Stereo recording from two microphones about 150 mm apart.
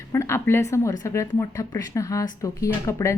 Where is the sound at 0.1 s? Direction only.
20° left (ahead or behind).